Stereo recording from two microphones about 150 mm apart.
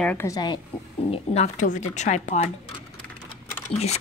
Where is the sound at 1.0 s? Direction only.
45° left (ahead or behind).